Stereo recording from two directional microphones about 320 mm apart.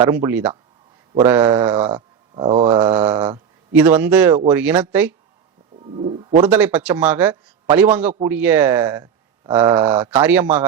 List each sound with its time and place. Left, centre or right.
0.0 s speech: centre
6.4 s speech: centre